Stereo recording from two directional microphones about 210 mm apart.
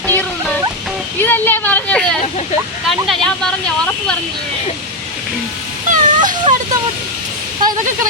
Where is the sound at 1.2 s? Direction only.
10° left (ahead or behind).